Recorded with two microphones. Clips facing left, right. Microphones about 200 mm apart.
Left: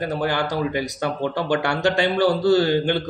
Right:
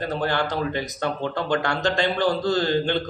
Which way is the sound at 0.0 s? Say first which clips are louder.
Left 1 dB; 10° left (ahead or behind).